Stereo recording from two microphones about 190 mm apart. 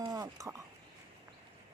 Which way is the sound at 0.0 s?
20° right (ahead or behind).